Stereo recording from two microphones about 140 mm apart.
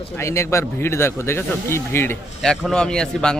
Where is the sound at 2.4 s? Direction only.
5° left (ahead or behind).